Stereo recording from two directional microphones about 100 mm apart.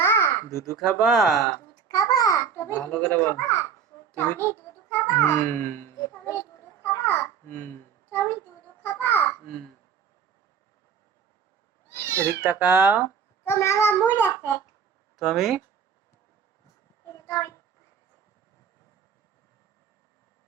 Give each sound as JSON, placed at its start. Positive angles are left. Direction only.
{"t": 0.0, "sound": "babbling", "side_deg": 25}
{"t": 0.8, "sound": "speech", "side_deg": -5}
{"t": 1.7, "sound": "babbling", "side_deg": 40}
{"t": 2.9, "sound": "a child's voice", "side_deg": 20}
{"t": 4.1, "sound": "a sound", "side_deg": 20}
{"t": 5.2, "sound": "a child's voice", "side_deg": 25}
{"t": 7.0, "sound": "babbling", "side_deg": 20}
{"t": 8.8, "sound": "a sound", "side_deg": 20}
{"t": 11.9, "sound": "cat", "side_deg": 20}
{"t": 12.4, "sound": "speech", "side_deg": -10}
{"t": 13.4, "sound": "a child's voice", "side_deg": 25}
{"t": 15.3, "sound": "speech", "side_deg": 0}
{"t": 17.1, "sound": "a sound", "side_deg": 30}